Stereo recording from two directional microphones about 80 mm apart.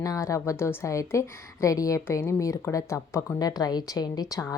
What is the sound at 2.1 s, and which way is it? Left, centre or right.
A woman's voice, left.